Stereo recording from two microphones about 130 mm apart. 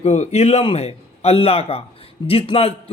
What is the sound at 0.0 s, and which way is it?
A man's voice, 60° left (ahead or behind).